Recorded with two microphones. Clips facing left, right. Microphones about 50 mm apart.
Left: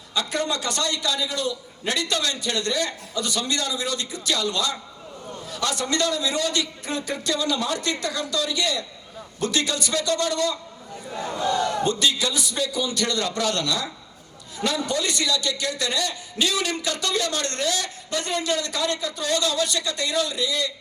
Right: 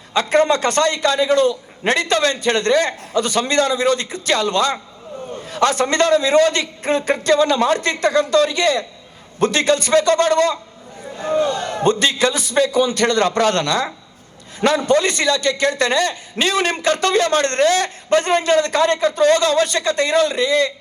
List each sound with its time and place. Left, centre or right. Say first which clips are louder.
0.1 s a man's voice: right 10 dB; right